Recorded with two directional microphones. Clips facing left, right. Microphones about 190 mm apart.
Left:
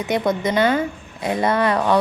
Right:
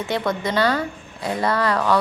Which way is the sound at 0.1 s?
20° left (ahead or behind).